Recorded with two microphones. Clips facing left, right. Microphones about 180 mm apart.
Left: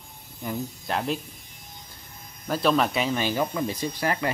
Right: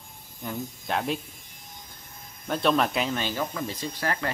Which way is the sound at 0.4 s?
5° left (ahead or behind).